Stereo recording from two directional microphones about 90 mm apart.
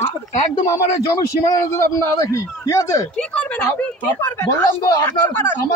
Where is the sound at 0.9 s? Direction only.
40° left (ahead or behind).